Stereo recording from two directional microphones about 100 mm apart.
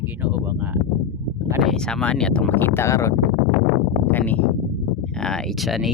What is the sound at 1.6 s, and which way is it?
Speech, 5° left (ahead or behind).